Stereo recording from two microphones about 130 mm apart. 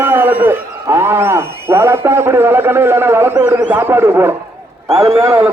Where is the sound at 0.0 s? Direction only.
15° right (ahead or behind).